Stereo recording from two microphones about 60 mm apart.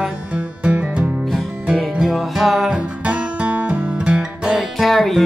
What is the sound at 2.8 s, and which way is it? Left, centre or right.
Music, right.